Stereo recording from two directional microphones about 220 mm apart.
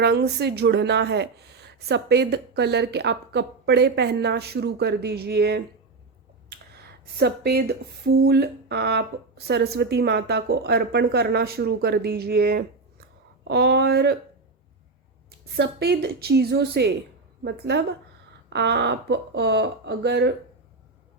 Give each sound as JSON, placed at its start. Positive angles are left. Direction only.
{"t": 0.0, "sound": "a woman's voice", "side_deg": -50}
{"t": 7.0, "sound": "a woman's voice", "side_deg": -45}
{"t": 15.5, "sound": "a woman's voice", "side_deg": -45}